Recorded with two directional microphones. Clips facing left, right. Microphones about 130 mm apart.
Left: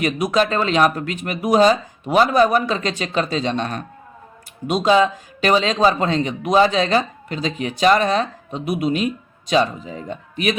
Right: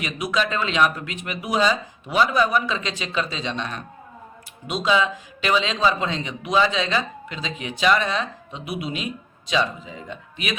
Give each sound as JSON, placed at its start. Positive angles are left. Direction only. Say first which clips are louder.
{"t": 0.0, "sound": "speech", "louder": "left 6 dB", "side_deg": 45}